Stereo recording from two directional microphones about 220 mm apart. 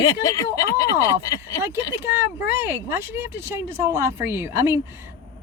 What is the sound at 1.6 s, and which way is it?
Speech, 10° right (ahead or behind).